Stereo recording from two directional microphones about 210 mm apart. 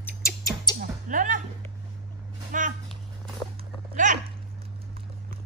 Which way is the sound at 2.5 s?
40° right (ahead or behind).